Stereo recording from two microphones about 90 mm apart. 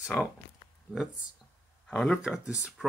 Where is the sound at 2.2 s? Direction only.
10° right (ahead or behind).